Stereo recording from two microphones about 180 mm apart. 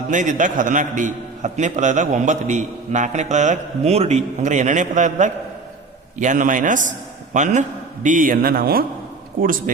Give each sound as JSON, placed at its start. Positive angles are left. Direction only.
{"t": 0.1, "sound": "a man's voice", "side_deg": -45}